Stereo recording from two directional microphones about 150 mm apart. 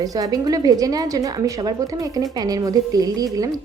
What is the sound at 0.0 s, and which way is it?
A woman's voice, 25° right (ahead or behind).